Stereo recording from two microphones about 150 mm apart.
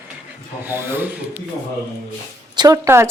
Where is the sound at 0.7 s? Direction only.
15° right (ahead or behind).